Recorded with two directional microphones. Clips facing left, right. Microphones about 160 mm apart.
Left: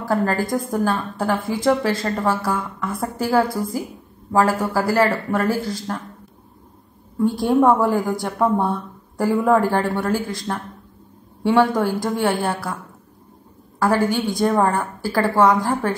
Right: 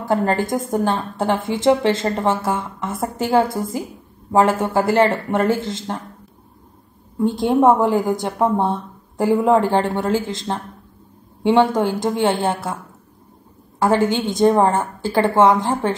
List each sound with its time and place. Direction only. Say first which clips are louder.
0.0 s a woman's voice: right 2 dB; 25° right (ahead or behind)
7.2 s a woman's voice: even; 20° right (ahead or behind)
13.7 s a woman's voice: right 2 dB; 20° right (ahead or behind)